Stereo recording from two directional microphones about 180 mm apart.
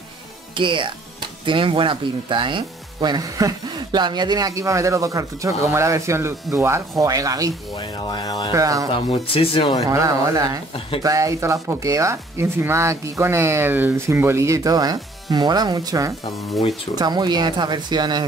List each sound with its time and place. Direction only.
0.6 s speech: 25° right (ahead or behind)
8.1 s speech: 20° left (ahead or behind)
8.5 s speech: 20° right (ahead or behind)
8.9 s speech: 30° left (ahead or behind)
9.8 s speech: 20° right (ahead or behind)